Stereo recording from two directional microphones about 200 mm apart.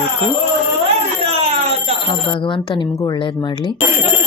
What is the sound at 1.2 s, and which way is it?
Alarm, 30° right (ahead or behind).